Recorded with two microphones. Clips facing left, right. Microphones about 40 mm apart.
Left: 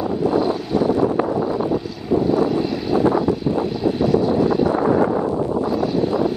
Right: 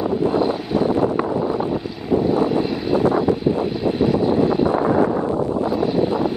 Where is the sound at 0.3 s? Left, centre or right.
Right.